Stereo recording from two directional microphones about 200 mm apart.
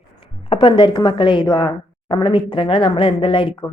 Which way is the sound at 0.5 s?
25° left (ahead or behind).